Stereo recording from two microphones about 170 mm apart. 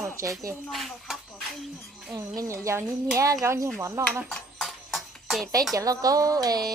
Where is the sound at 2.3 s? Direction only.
15° right (ahead or behind).